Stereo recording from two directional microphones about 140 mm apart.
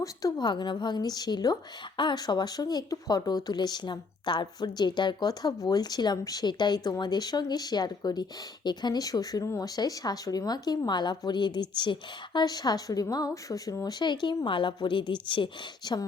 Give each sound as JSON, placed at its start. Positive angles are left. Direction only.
{"t": 0.0, "sound": "a woman's voice", "side_deg": 25}